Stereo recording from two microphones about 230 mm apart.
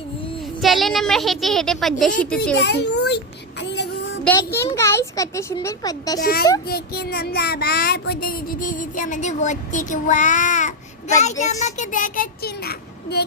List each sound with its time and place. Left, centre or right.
0.6 s a woman's voice: centre
2.6 s a child's voice: left
3.6 s child singing: left
4.2 s speech: centre
6.1 s child singing: left
11.2 s speech: left